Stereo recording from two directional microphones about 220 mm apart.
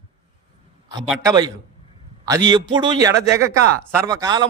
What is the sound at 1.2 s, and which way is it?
A man's voice, 20° right (ahead or behind).